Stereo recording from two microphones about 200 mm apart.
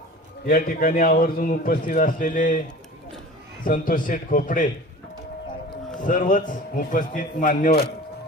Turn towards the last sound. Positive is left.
turn(degrees=45)  # may be behind; listen again after turning